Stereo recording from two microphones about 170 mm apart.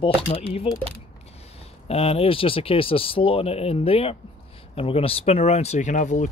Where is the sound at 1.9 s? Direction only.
35° left (ahead or behind).